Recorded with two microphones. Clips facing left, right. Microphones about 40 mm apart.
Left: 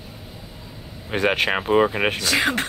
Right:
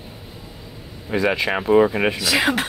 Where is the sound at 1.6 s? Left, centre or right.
Left.